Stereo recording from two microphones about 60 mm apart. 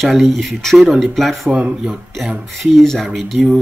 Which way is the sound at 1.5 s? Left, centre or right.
Centre.